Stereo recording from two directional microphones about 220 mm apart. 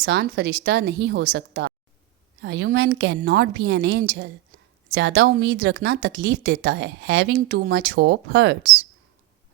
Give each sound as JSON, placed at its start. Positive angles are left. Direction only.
{"t": 0.0, "sound": "speech", "side_deg": -50}